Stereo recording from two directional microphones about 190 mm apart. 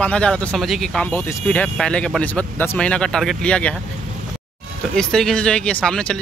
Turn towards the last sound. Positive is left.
turn(degrees=5)  # may be behind; listen again after turning